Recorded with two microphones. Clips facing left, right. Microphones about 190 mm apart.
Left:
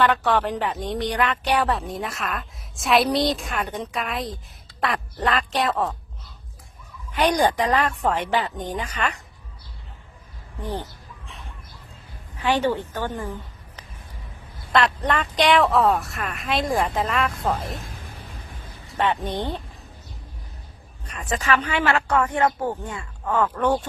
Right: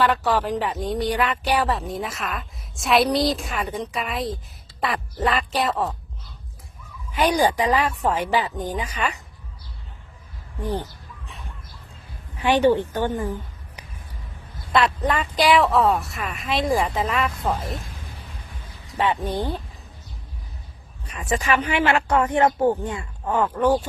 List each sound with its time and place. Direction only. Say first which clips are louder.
0.0 s a woman's voice: even; centre (ahead or behind)
7.2 s speech: even; 5° right (ahead or behind)
10.6 s speech: right 3 dB; 10° right (ahead or behind)
12.4 s speech: right 4 dB; 15° right (ahead or behind)
14.7 s a woman's voice: even; centre (ahead or behind)
18.9 s speech: right 1 dB; 5° right (ahead or behind)
21.1 s speech: right 1 dB; 10° right (ahead or behind)